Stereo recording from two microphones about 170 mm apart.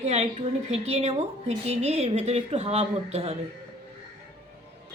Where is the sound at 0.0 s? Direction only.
45° right (ahead or behind).